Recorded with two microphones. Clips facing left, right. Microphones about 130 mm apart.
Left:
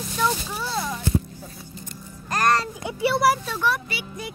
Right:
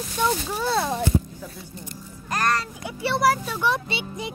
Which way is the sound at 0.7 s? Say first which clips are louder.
Right 6 dB; 65° right (ahead or behind).